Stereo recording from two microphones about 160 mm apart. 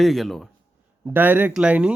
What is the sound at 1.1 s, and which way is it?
Speech, 10° right (ahead or behind).